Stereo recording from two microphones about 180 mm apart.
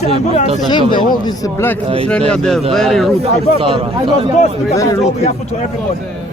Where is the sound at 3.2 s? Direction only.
30° right (ahead or behind).